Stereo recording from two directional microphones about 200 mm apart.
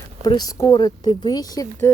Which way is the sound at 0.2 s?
20° left (ahead or behind).